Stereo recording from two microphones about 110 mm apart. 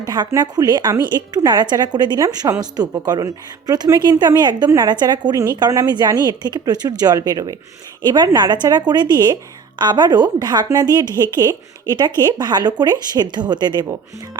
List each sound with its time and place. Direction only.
0.3 s a woman's voice: 35° right (ahead or behind)